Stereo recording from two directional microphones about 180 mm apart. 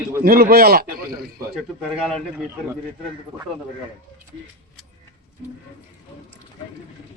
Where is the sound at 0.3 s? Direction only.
55° right (ahead or behind).